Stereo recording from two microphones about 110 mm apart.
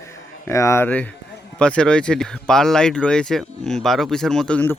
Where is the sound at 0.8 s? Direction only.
15° left (ahead or behind).